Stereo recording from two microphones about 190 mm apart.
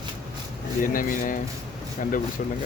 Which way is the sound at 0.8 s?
45° left (ahead or behind).